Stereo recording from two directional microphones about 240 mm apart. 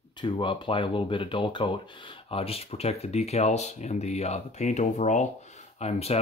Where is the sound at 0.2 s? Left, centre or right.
Centre.